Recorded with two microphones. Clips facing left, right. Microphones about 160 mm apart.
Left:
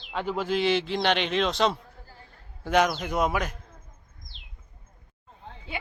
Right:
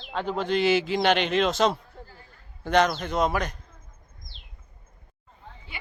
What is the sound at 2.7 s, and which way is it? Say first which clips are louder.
Speech: right 1 dB; 10° left (ahead or behind).